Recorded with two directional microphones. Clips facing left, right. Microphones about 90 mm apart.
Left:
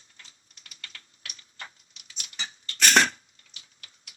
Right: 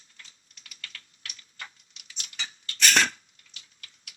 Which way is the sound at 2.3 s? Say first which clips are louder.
Left 1 dB; 35° left (ahead or behind).